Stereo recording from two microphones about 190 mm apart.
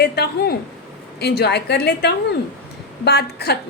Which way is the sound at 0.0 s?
60° left (ahead or behind).